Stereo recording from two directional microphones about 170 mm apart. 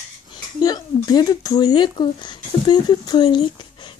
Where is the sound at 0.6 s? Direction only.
25° left (ahead or behind).